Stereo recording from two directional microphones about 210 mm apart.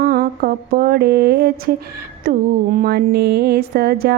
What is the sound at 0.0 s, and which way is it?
Mantra, 45° right (ahead or behind).